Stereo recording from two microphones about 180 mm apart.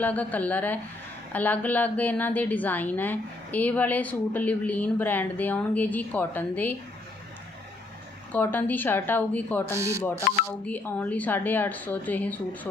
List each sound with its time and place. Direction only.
0.0 s a woman's voice: 10° left (ahead or behind)
8.3 s a woman's voice: 10° left (ahead or behind)
9.7 s music: 15° right (ahead or behind)
10.3 s speech: 50° left (ahead or behind)
10.7 s a woman's voice: 10° left (ahead or behind)